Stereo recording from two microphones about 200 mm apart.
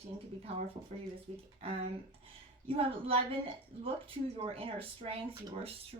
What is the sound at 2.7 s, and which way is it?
Speech, 30° right (ahead or behind).